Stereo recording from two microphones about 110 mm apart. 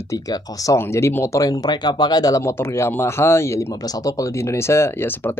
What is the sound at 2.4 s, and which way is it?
Speech, 25° left (ahead or behind).